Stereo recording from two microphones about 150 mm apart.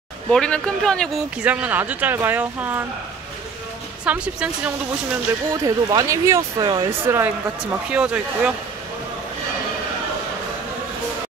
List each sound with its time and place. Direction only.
0.3 s speech: 5° left (ahead or behind)
1.4 s speech: 10° right (ahead or behind)
4.0 s speech: 5° right (ahead or behind)
5.5 s speech: 25° right (ahead or behind)
6.9 s speech: 15° right (ahead or behind)